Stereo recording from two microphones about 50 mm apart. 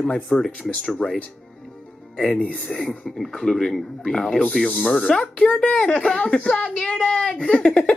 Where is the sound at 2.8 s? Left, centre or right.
Centre.